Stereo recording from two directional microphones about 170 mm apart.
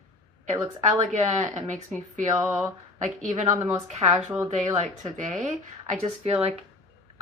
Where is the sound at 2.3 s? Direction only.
15° right (ahead or behind).